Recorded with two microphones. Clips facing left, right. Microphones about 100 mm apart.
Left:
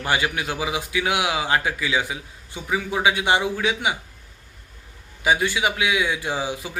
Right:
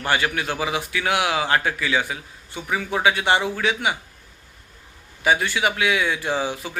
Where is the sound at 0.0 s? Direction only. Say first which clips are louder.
Right 1 dB; 15° left (ahead or behind).